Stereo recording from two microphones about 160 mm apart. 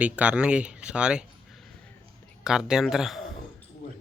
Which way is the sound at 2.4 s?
5° right (ahead or behind).